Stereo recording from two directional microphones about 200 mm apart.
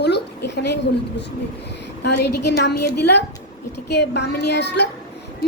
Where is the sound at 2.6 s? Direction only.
55° left (ahead or behind).